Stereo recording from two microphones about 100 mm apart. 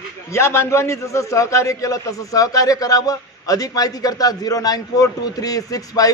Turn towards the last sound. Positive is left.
turn(degrees=35)  # may be behind; listen again after turning